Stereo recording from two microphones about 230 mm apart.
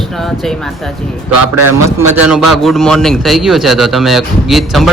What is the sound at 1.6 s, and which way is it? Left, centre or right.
A man's voice, centre.